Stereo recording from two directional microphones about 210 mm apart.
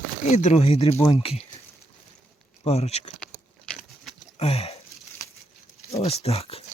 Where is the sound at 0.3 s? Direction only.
30° left (ahead or behind).